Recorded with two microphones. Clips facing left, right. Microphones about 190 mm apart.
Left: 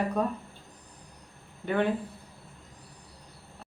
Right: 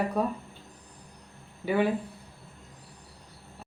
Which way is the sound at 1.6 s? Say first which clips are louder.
Right 2 dB; 5° right (ahead or behind).